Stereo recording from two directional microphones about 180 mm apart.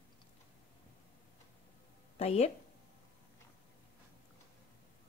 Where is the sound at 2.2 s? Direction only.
35° left (ahead or behind).